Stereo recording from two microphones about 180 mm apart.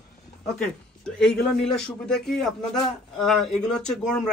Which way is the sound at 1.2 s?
5° left (ahead or behind).